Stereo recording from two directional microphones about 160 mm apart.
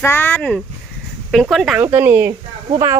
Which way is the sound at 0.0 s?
15° left (ahead or behind).